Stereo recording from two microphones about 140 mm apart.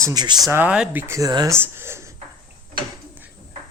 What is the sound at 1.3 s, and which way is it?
Speech, 30° right (ahead or behind).